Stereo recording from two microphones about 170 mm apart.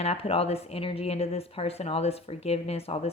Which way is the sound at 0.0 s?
35° left (ahead or behind).